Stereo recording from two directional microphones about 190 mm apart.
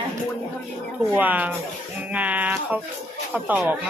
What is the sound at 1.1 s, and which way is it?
A woman's voice, 10° right (ahead or behind).